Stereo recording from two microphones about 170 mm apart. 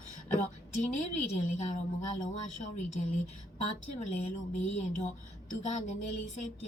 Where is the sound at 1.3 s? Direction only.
40° left (ahead or behind).